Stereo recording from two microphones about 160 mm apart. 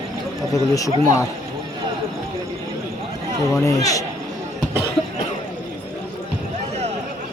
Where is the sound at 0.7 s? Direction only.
20° left (ahead or behind).